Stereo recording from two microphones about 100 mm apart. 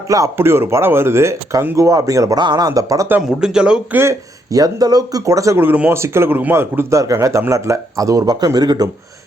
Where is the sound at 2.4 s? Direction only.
45° right (ahead or behind).